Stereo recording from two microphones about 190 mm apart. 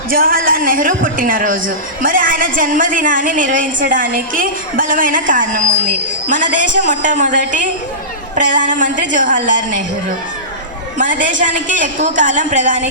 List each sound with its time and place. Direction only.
0.1 s a woman's voice: 50° right (ahead or behind)
10.9 s a woman's voice: 45° right (ahead or behind)